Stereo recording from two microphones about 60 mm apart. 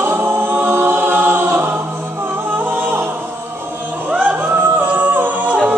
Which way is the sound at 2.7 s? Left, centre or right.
Right.